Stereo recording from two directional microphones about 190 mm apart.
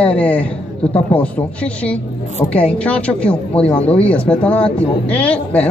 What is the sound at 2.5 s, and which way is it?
A woman's voice, 5° left (ahead or behind).